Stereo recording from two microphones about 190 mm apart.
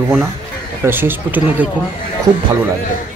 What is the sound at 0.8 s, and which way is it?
Speech, 10° right (ahead or behind).